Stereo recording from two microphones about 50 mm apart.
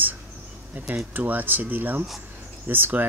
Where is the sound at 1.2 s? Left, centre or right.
Right.